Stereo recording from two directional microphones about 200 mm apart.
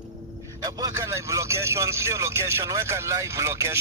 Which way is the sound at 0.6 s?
20° right (ahead or behind).